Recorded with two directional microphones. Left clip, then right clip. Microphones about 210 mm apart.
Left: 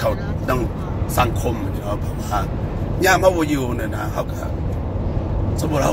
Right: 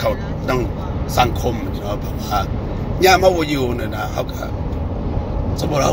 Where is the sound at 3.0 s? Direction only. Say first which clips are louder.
Right 3 dB; 15° right (ahead or behind).